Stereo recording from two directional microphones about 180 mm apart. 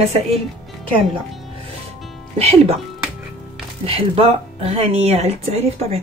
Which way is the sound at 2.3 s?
35° right (ahead or behind).